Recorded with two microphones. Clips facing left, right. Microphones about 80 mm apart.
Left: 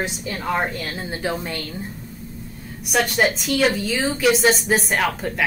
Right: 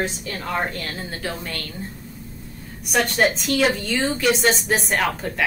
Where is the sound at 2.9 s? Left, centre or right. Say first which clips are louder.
Even; centre.